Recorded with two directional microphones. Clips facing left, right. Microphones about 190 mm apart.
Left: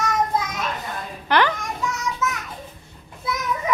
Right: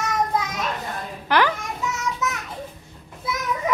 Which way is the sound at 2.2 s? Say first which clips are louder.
Left 2 dB; 15° right (ahead or behind).